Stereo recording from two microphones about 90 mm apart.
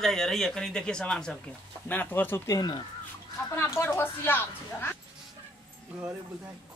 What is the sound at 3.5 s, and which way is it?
Speech, 25° left (ahead or behind).